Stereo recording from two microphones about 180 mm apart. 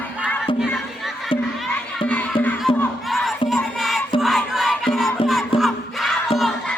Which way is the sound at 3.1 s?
Centre (ahead or behind).